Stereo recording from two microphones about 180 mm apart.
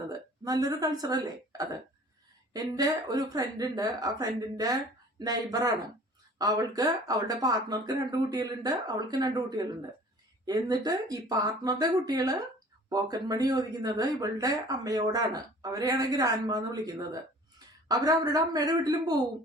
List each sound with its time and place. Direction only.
0.4 s speech: 20° right (ahead or behind)